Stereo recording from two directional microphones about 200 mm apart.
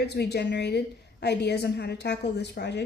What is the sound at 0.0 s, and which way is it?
A woman's voice, 55° left (ahead or behind).